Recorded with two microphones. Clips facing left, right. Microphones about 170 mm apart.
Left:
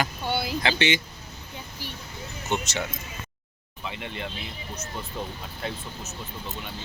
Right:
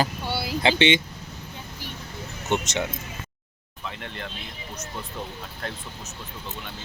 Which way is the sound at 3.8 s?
5° left (ahead or behind).